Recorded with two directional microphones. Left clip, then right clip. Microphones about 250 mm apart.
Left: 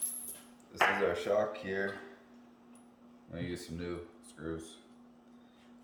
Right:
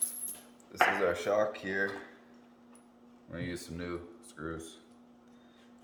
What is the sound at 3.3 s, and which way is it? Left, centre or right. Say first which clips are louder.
Speech: right 1 dB; centre.